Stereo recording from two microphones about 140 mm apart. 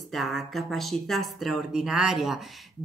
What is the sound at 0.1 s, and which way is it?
Speech, centre (ahead or behind).